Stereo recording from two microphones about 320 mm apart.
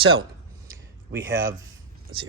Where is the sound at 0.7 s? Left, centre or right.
Centre.